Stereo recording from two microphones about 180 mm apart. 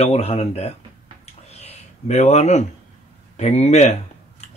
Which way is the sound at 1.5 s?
35° left (ahead or behind).